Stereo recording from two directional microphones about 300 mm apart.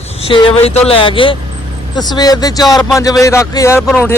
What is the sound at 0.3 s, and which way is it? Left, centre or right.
Speech, centre.